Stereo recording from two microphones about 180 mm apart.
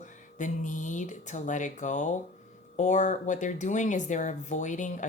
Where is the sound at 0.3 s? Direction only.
45° left (ahead or behind).